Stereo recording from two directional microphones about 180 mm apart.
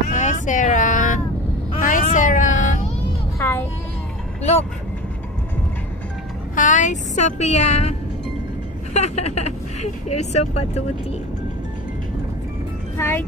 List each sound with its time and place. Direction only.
0.1 s vehicle: 40° left (ahead or behind)
1.8 s a sound: 45° left (ahead or behind)
3.3 s vehicle: 10° left (ahead or behind)
4.4 s vehicle: 35° left (ahead or behind)
6.5 s speech: 45° left (ahead or behind)
8.9 s a sound: 40° left (ahead or behind)
10.3 s speech: 35° left (ahead or behind)
12.9 s speech: 15° left (ahead or behind)